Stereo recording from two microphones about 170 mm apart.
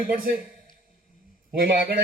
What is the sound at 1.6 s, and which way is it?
Speech, 60° right (ahead or behind).